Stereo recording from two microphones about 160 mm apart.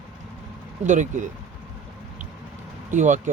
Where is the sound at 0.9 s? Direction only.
50° right (ahead or behind).